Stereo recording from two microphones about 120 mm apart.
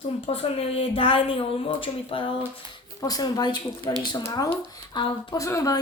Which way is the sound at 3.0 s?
30° left (ahead or behind).